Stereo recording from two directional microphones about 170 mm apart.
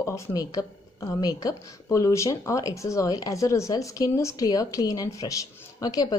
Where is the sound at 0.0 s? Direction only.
20° left (ahead or behind).